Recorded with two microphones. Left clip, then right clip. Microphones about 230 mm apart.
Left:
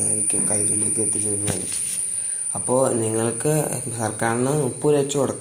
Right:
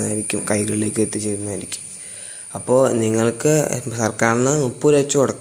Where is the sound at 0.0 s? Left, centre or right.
Right.